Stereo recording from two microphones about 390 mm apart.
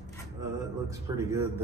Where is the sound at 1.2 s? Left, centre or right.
Centre.